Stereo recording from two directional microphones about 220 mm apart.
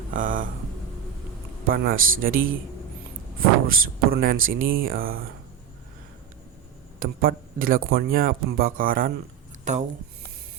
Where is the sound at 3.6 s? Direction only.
40° right (ahead or behind).